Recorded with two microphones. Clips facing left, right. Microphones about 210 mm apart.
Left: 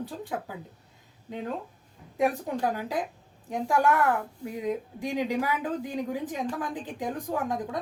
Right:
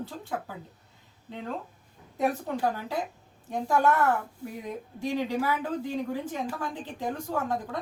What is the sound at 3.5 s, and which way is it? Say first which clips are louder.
A woman's voice: even; 10° left (ahead or behind).